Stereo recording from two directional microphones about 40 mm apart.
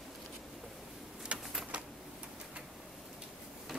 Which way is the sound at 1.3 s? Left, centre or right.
Right.